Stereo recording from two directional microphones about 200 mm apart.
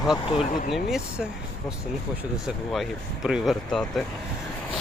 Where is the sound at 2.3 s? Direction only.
Centre (ahead or behind).